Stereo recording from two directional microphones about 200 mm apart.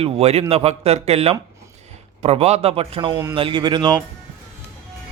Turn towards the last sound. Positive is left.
turn(degrees=-20)  # may be behind; listen again after turning